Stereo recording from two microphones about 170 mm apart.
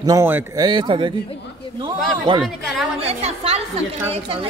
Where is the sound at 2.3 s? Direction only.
30° right (ahead or behind).